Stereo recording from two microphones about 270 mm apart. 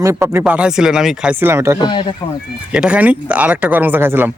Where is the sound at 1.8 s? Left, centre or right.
Centre.